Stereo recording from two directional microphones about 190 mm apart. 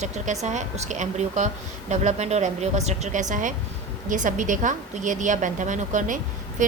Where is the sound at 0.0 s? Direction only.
40° right (ahead or behind).